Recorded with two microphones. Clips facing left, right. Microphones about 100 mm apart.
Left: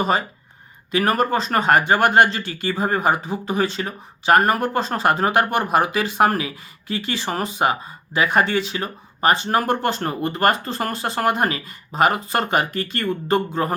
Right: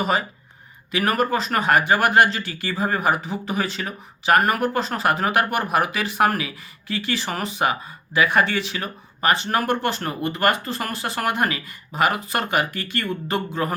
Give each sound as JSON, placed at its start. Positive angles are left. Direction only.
{"t": 0.9, "sound": "speech", "side_deg": 30}